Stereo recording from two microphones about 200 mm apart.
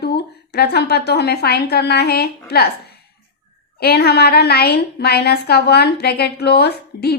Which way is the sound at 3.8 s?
55° left (ahead or behind).